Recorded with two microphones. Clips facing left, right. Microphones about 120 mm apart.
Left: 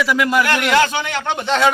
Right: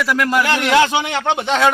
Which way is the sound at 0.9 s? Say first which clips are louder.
Right 3 dB; 20° right (ahead or behind).